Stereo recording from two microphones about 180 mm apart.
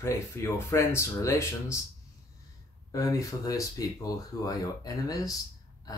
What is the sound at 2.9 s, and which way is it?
Speech, 20° left (ahead or behind).